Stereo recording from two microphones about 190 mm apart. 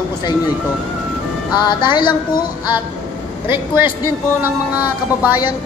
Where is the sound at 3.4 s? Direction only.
10° right (ahead or behind).